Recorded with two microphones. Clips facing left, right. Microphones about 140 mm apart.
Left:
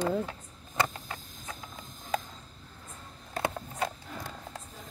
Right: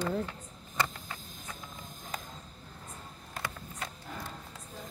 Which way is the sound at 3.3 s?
65° left (ahead or behind).